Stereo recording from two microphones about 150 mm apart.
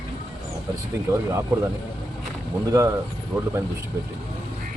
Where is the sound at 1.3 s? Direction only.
20° right (ahead or behind).